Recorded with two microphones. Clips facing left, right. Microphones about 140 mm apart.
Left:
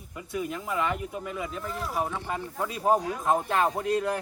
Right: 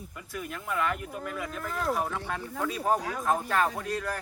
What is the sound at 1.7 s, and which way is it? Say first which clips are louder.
Speech: right 4 dB; 60° right (ahead or behind).